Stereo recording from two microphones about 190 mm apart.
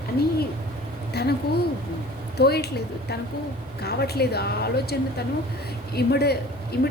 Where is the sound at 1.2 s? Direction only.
60° left (ahead or behind).